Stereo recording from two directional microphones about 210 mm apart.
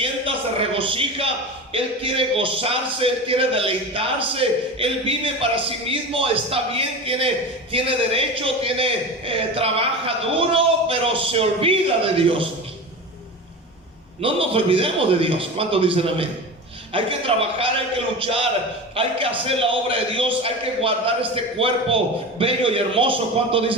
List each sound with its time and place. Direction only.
0.0 s a man's voice: 25° right (ahead or behind)
14.2 s a man's voice: 25° right (ahead or behind)
19.5 s a man's voice: 25° right (ahead or behind)